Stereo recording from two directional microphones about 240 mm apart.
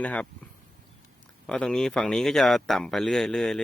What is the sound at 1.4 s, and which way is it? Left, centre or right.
Speech, centre.